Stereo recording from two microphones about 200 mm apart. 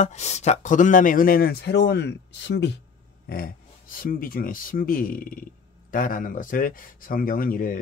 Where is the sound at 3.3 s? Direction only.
45° left (ahead or behind).